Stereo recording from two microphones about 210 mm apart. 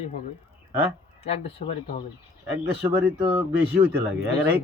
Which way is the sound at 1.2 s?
30° left (ahead or behind).